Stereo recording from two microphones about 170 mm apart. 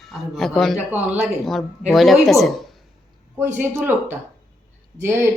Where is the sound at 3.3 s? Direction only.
15° right (ahead or behind).